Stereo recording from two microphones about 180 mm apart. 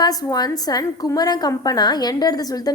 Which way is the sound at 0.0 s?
20° left (ahead or behind).